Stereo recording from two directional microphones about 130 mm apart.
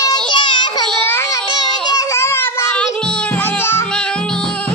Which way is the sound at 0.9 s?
15° left (ahead or behind).